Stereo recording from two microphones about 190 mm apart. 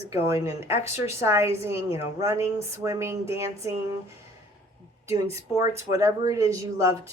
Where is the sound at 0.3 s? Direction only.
15° right (ahead or behind).